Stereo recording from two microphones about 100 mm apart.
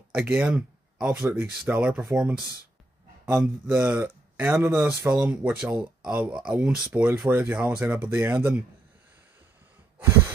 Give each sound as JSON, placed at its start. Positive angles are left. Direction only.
{"t": 0.1, "sound": "speech", "side_deg": -15}
{"t": 1.2, "sound": "speech", "side_deg": -20}